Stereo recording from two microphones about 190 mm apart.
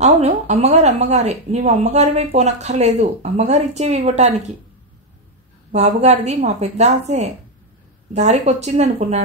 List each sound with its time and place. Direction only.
0.0 s speech: 35° right (ahead or behind)
5.7 s speech: 35° right (ahead or behind)